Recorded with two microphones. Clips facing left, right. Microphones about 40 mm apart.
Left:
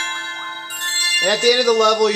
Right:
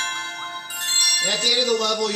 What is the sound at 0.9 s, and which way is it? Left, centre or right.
Music, centre.